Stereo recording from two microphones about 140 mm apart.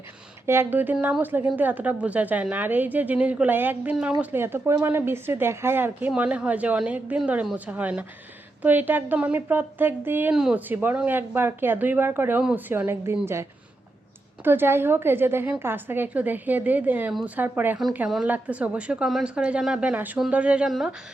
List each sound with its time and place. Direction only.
0.4 s speech: 15° right (ahead or behind)